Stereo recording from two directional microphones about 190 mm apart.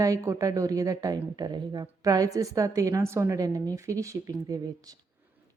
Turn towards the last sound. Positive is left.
turn(degrees=-20)  # may be behind; listen again after turning